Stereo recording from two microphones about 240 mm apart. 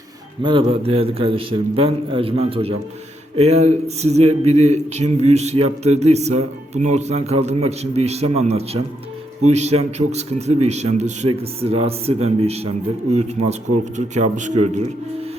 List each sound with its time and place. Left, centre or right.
0.4 s a man's voice: right